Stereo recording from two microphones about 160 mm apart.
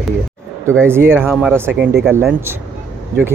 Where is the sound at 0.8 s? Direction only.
15° right (ahead or behind).